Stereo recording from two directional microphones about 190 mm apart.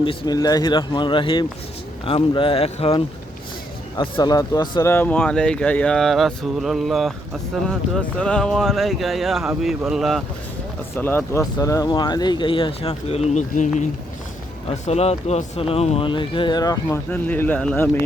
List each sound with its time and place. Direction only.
0.0 s speech: 25° left (ahead or behind)
3.9 s speech: 20° left (ahead or behind); by 10.2 s centre (ahead or behind)
10.9 s speech: 10° left (ahead or behind)